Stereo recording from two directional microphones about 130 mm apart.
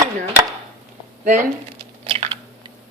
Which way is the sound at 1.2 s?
90° right.